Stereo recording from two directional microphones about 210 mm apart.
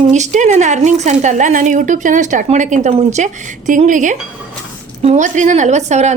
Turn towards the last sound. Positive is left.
turn(degrees=-35)  # may be behind; listen again after turning